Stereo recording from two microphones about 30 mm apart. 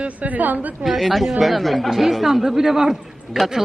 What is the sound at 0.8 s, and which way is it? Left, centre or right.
A woman's voice, centre.